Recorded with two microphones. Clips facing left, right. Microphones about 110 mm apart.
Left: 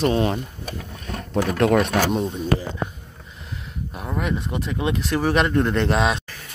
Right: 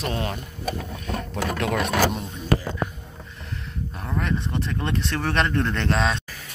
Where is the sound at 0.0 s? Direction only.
25° left (ahead or behind).